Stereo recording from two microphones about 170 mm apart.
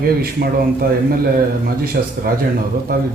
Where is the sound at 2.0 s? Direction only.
55° right (ahead or behind).